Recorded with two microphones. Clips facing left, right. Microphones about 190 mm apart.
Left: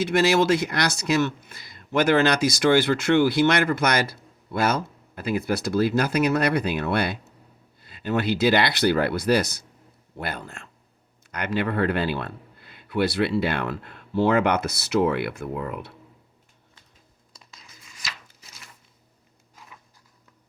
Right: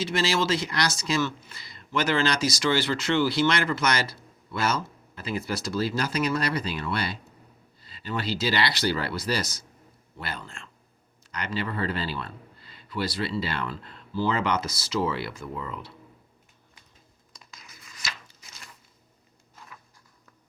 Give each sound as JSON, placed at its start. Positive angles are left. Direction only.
{"t": 0.0, "sound": "speech", "side_deg": 55}
{"t": 17.4, "sound": "tearing", "side_deg": 30}